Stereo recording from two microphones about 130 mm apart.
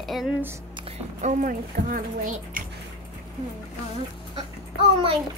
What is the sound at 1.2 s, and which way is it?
Speech, 80° right.